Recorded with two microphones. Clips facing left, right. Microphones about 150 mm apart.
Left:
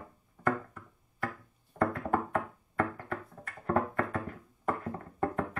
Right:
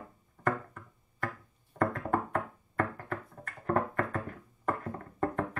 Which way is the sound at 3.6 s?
40° right (ahead or behind).